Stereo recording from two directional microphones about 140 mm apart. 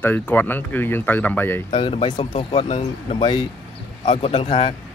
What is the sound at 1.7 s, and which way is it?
Speech, 40° left (ahead or behind).